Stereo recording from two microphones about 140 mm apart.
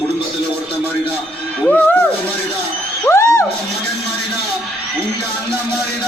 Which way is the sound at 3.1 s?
20° left (ahead or behind).